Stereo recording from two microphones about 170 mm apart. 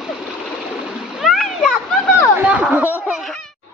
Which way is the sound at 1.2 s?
Centre (ahead or behind).